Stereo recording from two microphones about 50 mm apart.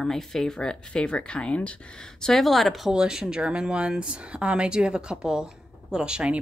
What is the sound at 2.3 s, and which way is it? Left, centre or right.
Speech, centre.